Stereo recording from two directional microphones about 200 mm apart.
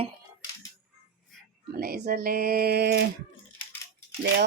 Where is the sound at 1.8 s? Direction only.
50° right (ahead or behind).